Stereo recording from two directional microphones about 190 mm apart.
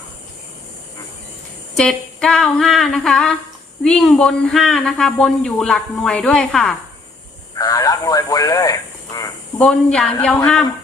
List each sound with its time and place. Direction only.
1.8 s speech: 5° left (ahead or behind)
7.6 s radio: 20° left (ahead or behind)
9.6 s speech: 5° left (ahead or behind)